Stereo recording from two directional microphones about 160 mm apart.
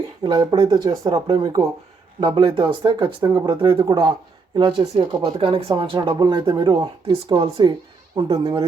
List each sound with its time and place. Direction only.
0.2 s speech: 25° right (ahead or behind)